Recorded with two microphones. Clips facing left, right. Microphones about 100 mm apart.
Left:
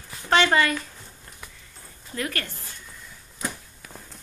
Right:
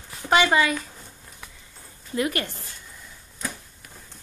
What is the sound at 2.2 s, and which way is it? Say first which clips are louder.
Speech: right 5 dB; 15° right (ahead or behind).